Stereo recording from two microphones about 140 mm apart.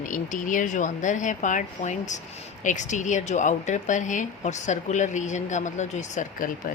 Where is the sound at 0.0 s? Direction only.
70° left (ahead or behind).